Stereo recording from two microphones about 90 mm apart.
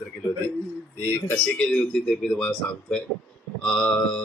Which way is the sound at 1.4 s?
10° left (ahead or behind).